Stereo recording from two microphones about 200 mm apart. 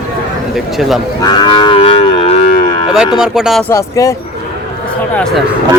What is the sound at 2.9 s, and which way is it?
Speech, 5° right (ahead or behind).